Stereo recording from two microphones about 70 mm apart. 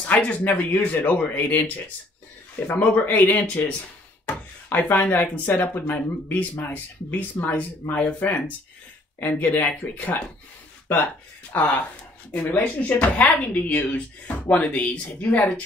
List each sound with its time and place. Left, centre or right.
0.0 s speech: centre
11.5 s speech: left